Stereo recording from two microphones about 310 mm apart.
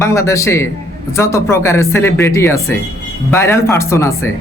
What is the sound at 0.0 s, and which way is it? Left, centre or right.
A woman's voice, centre.